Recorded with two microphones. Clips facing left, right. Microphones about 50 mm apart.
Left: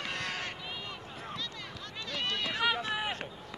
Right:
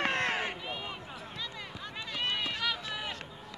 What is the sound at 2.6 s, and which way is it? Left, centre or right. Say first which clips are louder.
Run: left 4 dB; left.